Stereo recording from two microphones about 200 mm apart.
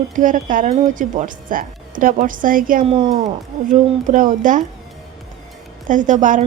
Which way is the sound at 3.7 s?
40° right (ahead or behind).